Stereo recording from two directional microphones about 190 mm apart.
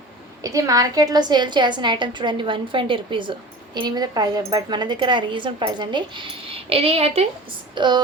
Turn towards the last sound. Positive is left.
turn(degrees=-25)  # may be behind; listen again after turning